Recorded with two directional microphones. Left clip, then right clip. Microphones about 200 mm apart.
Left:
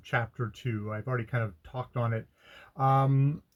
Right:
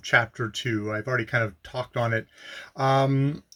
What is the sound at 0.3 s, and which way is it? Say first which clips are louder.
Speech: right 9 dB; 25° right (ahead or behind).